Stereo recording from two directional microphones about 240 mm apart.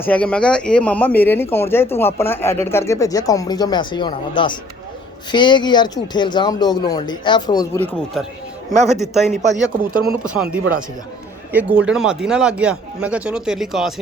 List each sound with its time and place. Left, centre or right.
0.0 s speech: centre
8.7 s a man's voice: right
9.0 s speech: centre